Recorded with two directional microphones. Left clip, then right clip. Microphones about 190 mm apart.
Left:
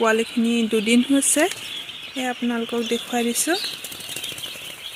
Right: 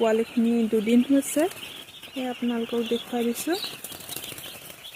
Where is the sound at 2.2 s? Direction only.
15° left (ahead or behind).